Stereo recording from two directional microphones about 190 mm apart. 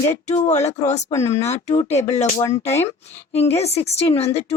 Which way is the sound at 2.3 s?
15° left (ahead or behind).